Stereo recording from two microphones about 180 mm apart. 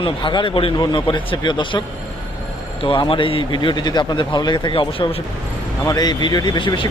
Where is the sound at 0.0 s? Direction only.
25° left (ahead or behind).